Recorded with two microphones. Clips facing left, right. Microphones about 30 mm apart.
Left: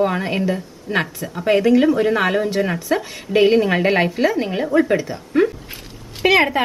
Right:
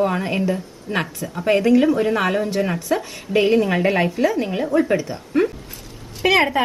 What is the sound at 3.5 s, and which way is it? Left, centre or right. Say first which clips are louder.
Speech: left 2 dB; left.